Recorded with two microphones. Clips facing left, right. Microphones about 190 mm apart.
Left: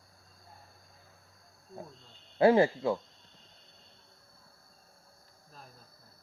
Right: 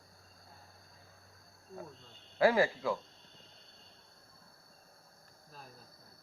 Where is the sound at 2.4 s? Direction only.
25° left (ahead or behind).